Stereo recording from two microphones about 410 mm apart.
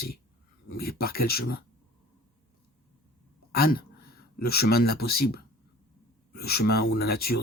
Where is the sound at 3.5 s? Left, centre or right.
Left.